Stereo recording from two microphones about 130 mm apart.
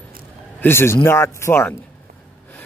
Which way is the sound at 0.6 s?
20° left (ahead or behind).